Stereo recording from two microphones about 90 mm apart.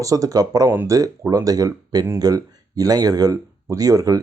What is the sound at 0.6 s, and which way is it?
Speech, 30° right (ahead or behind).